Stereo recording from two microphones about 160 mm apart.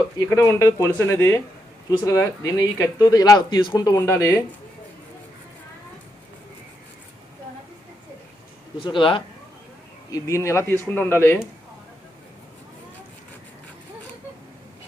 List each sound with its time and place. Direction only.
0.2 s speech: 20° left (ahead or behind)
8.9 s speech: 30° left (ahead or behind)
10.1 s speech: 20° left (ahead or behind)